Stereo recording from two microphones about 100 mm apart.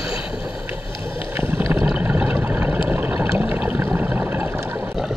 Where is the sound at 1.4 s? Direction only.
20° right (ahead or behind).